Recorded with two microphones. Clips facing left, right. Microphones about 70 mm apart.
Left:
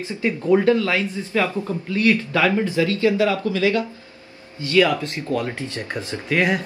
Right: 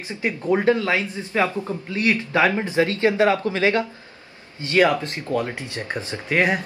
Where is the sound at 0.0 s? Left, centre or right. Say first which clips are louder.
Left 2 dB; right.